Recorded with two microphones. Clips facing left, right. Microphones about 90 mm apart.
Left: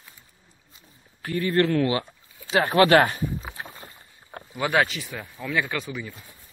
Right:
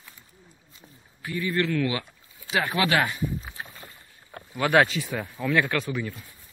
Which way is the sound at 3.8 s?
35° left (ahead or behind).